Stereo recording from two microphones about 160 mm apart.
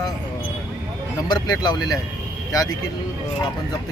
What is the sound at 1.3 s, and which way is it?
Speech, 25° left (ahead or behind).